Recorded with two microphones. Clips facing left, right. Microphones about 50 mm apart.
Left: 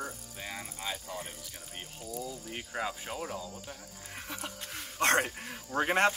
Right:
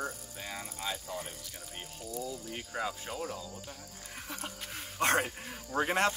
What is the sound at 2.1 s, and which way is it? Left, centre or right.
Speech, centre.